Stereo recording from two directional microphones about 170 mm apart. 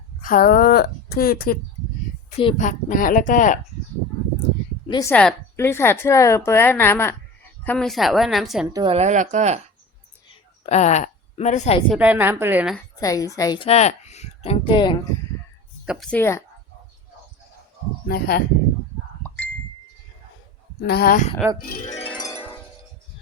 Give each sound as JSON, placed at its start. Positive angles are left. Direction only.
{"t": 0.2, "sound": "a woman's voice", "side_deg": 55}
{"t": 2.6, "sound": "speech", "side_deg": 50}
{"t": 4.9, "sound": "a woman's voice", "side_deg": 20}
{"t": 5.1, "sound": "a woman's voice", "side_deg": 10}
{"t": 8.7, "sound": "speech", "side_deg": -25}
{"t": 9.0, "sound": "speech", "side_deg": -45}
{"t": 10.2, "sound": "a sound", "side_deg": 40}
{"t": 11.9, "sound": "a woman's voice", "side_deg": -10}
{"t": 13.0, "sound": "a woman's voice", "side_deg": 20}
{"t": 13.7, "sound": "speech", "side_deg": 40}
{"t": 15.9, "sound": "a woman's voice", "side_deg": 5}
{"t": 18.1, "sound": "speech", "side_deg": 65}
{"t": 20.8, "sound": "a woman's voice", "side_deg": 65}